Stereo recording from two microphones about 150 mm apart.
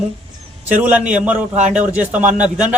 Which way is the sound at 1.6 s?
55° right (ahead or behind).